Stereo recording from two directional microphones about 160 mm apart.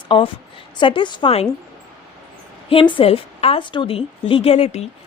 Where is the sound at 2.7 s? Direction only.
30° left (ahead or behind).